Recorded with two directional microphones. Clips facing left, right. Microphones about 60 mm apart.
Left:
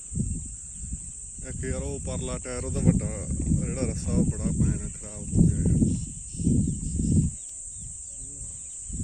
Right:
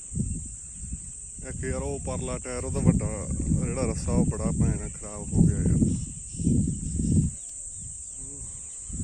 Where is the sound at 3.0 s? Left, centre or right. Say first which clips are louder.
Even; right.